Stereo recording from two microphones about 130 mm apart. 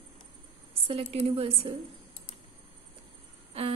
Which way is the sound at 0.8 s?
50° right (ahead or behind).